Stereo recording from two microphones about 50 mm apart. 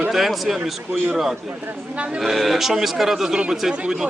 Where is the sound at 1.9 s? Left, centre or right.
Right.